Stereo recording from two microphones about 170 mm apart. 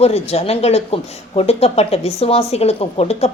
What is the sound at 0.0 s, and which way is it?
A woman's voice, 40° left (ahead or behind).